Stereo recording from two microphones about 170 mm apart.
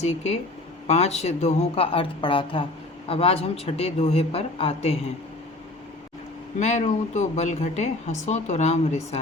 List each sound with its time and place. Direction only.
0.0 s speech: 40° left (ahead or behind)
6.6 s speech: 40° left (ahead or behind)